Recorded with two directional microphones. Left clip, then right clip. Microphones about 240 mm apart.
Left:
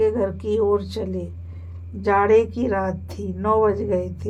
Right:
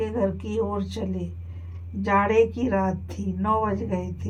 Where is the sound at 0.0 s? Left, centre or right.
Left.